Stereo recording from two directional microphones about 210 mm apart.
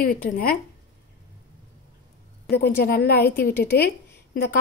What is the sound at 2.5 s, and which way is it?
A woman's voice, 50° left (ahead or behind).